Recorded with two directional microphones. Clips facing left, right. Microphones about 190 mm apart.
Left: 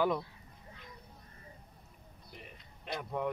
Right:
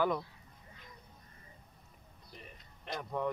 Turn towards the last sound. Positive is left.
turn(degrees=5)  # may be behind; listen again after turning